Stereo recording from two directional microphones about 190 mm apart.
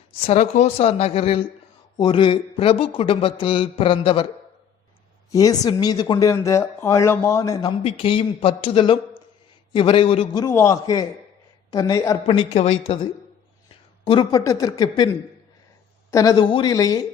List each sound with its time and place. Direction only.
0.3 s speech: 35° left (ahead or behind)
5.3 s speech: 20° left (ahead or behind)
7.9 s speech: 30° left (ahead or behind)
10.4 s speech: 15° left (ahead or behind)
12.3 s speech: 30° left (ahead or behind)
16.1 s speech: 20° left (ahead or behind)